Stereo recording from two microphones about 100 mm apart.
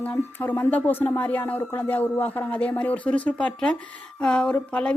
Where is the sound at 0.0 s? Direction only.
20° left (ahead or behind).